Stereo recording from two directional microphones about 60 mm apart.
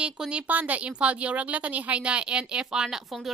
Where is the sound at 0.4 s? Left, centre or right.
Right.